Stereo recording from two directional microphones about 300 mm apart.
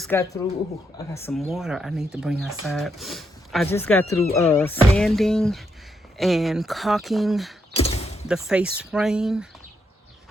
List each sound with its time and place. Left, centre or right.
0.0 s speech: centre
7.7 s mechanisms: centre
8.3 s speech: centre